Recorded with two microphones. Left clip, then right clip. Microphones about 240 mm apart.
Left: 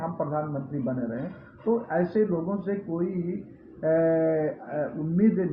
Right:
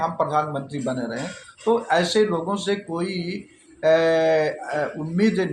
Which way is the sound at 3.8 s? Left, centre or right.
Right.